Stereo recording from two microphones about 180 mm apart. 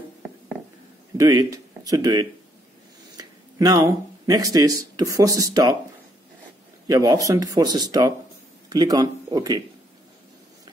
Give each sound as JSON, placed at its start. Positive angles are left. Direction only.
{"t": 1.1, "sound": "speech", "side_deg": -20}
{"t": 6.9, "sound": "speech", "side_deg": -20}